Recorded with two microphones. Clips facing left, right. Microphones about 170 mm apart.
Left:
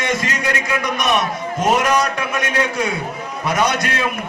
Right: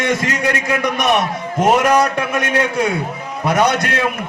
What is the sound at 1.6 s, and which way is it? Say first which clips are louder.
Speech: right 4 dB; 60° right (ahead or behind).